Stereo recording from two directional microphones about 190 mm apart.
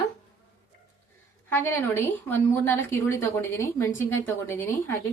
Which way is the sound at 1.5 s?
10° left (ahead or behind).